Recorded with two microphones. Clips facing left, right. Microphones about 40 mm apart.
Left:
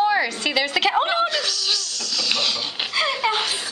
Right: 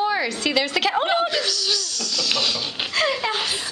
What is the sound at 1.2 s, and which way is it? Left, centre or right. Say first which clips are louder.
Speech: even; centre.